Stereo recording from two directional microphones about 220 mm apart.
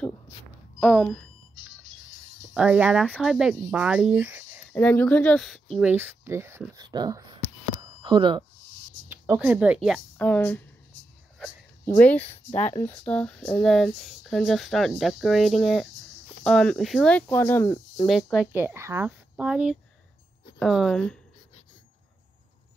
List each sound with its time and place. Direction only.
0.7 s speech: centre (ahead or behind)
2.5 s speech: 5° right (ahead or behind)
4.7 s speech: 5° left (ahead or behind); by 8.5 s 20° right (ahead or behind)
9.1 s speech: 10° right (ahead or behind)
11.3 s a sound: 5° left (ahead or behind)
12.3 s speech: 30° left (ahead or behind)
12.9 s speech: 5° left (ahead or behind)
18.0 s speech: centre (ahead or behind)